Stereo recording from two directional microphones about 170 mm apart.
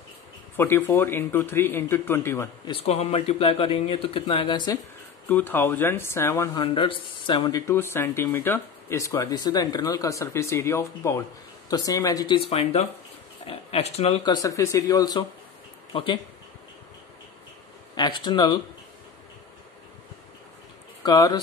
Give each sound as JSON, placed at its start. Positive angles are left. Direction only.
{"t": 0.6, "sound": "speech", "side_deg": 15}
{"t": 2.7, "sound": "speech", "side_deg": 35}
{"t": 5.3, "sound": "speech", "side_deg": 10}
{"t": 6.5, "sound": "speech", "side_deg": 30}
{"t": 7.6, "sound": "speech", "side_deg": 15}
{"t": 12.4, "sound": "speech", "side_deg": 35}
{"t": 17.9, "sound": "speech", "side_deg": 25}
{"t": 21.0, "sound": "speech", "side_deg": 25}